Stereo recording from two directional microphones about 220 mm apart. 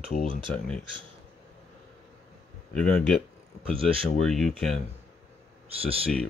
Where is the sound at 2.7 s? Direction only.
5° left (ahead or behind).